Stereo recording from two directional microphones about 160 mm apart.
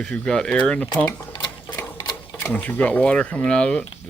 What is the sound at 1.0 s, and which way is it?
Sewing machine, 20° left (ahead or behind).